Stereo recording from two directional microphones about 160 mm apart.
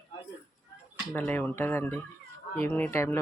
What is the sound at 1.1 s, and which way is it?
Speech, 10° left (ahead or behind).